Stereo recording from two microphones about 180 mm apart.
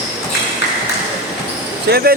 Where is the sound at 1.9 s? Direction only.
60° right (ahead or behind).